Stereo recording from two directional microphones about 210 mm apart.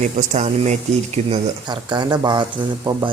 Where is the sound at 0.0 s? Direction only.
35° right (ahead or behind).